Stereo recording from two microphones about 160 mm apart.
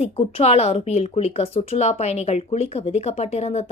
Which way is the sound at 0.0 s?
40° left (ahead or behind).